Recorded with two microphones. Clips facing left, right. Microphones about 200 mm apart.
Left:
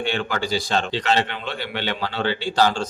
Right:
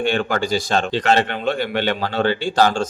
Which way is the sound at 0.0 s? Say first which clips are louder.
Right 5 dB; 50° right (ahead or behind).